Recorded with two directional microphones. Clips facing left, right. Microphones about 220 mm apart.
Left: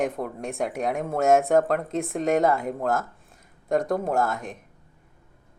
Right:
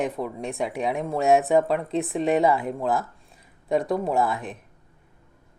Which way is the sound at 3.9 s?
Centre (ahead or behind).